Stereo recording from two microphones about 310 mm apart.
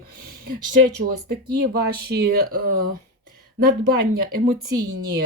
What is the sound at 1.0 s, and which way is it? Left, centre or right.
Speech, right.